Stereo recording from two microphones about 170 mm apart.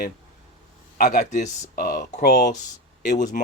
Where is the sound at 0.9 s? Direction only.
50° left (ahead or behind).